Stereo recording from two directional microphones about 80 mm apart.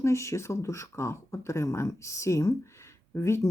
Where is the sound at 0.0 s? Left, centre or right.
Left.